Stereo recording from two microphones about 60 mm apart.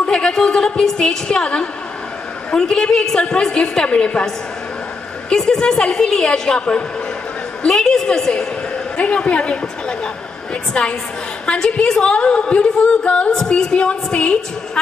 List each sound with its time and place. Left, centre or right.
0.0 s a woman's voice: centre
5.3 s a woman's voice: centre